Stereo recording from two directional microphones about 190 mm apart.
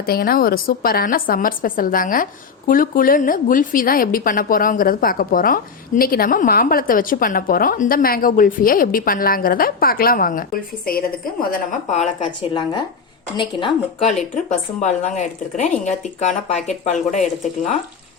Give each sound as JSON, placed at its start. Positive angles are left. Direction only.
{"t": 0.0, "sound": "a woman's voice", "side_deg": 50}
{"t": 12.4, "sound": "speech", "side_deg": 25}
{"t": 14.3, "sound": "speech", "side_deg": 40}